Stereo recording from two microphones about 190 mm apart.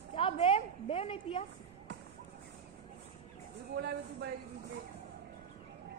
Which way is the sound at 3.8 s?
60° right (ahead or behind).